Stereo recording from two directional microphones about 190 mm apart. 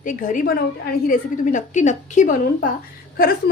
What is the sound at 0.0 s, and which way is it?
A woman's voice, 45° left (ahead or behind).